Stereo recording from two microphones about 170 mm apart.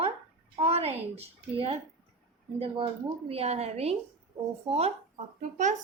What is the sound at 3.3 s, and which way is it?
A woman's voice, 35° right (ahead or behind).